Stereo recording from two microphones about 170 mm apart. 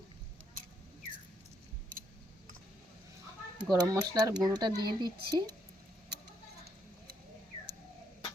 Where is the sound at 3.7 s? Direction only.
20° right (ahead or behind).